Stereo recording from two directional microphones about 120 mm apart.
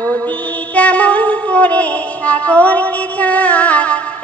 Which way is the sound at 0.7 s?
10° left (ahead or behind).